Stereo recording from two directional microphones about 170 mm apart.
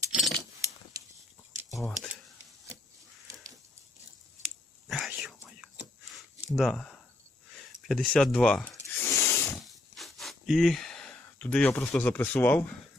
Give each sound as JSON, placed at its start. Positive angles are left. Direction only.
{"t": 0.1, "sound": "keys jangling", "side_deg": 0}
{"t": 1.7, "sound": "speech", "side_deg": 20}
{"t": 4.9, "sound": "whispering", "side_deg": 0}
{"t": 6.1, "sound": "a sound", "side_deg": 0}
{"t": 7.9, "sound": "snake", "side_deg": 5}
{"t": 9.6, "sound": "a sound", "side_deg": 0}
{"t": 11.9, "sound": "speech", "side_deg": 10}